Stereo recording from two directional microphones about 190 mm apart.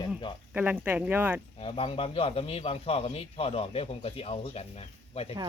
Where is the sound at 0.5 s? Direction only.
10° right (ahead or behind).